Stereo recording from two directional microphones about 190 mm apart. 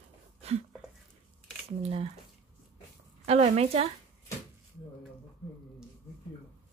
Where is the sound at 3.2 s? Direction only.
35° right (ahead or behind).